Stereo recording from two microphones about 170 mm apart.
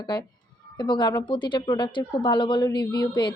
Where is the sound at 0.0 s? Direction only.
25° left (ahead or behind).